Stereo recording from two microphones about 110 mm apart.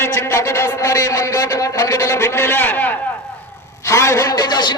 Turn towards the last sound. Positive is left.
turn(degrees=40)  # may be behind; listen again after turning